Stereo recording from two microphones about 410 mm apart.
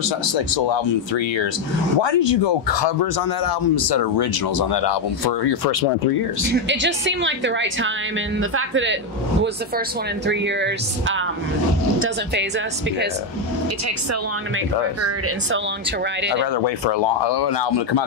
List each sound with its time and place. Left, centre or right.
0.7 s speech: left
6.5 s a woman's voice: right
10.2 s a woman's voice: right
15.0 s a woman's voice: right
16.5 s speech: left